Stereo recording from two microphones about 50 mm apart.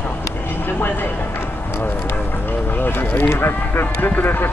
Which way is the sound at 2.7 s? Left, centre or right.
Left.